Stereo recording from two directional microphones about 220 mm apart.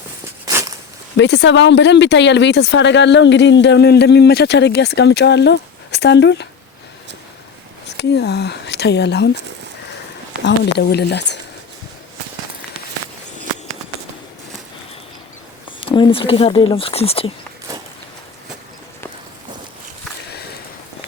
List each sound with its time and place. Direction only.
0.4 s walk: 15° right (ahead or behind)
1.1 s speech: 55° left (ahead or behind)
7.9 s speech: 50° left (ahead or behind)
10.4 s speech: 50° left (ahead or behind)
15.8 s speech: 25° left (ahead or behind)
17.7 s walk: 15° right (ahead or behind)